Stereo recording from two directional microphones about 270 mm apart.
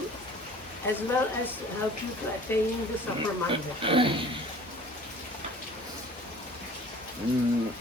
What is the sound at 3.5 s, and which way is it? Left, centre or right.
Speech, centre.